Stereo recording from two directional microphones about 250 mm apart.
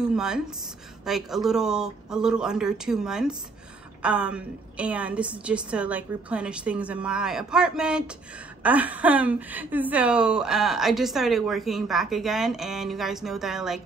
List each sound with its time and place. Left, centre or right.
0.0 s a woman's voice: centre